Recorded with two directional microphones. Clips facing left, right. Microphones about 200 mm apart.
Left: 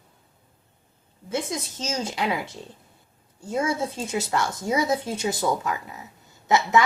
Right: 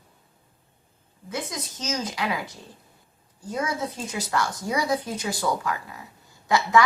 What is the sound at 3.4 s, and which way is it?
A woman's voice, 25° left (ahead or behind).